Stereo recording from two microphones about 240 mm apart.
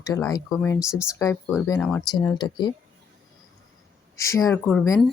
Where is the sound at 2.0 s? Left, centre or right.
Centre.